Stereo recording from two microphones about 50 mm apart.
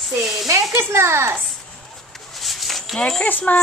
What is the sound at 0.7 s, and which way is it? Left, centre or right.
Speech, right.